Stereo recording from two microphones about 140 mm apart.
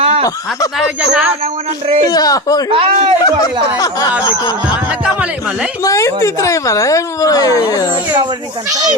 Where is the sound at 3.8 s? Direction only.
25° left (ahead or behind).